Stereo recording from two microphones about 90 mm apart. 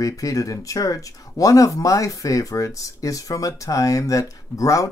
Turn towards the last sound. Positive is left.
turn(degrees=40)  # may be behind; listen again after turning